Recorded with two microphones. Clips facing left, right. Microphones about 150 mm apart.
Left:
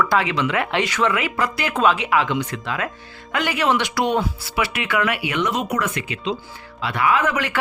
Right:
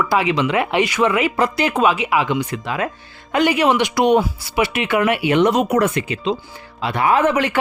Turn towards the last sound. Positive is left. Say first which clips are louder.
# right 5 dB
turn(degrees=-25)  # may be behind; listen again after turning